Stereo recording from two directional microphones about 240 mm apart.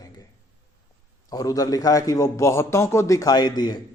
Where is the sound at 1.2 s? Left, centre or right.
Centre.